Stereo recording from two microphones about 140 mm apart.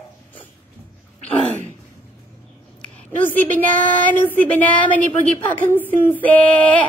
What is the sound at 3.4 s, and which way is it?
Speech, 10° left (ahead or behind).